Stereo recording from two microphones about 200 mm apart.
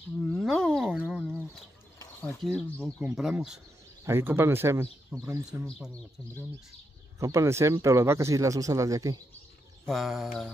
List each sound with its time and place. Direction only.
0.3 s wild animals: centre (ahead or behind)
0.8 s a sound: 5° right (ahead or behind)
2.4 s speech: centre (ahead or behind); by 5.4 s 15° right (ahead or behind)
5.5 s speech: centre (ahead or behind)
7.2 s speech: 15° right (ahead or behind)
9.8 s speech: centre (ahead or behind)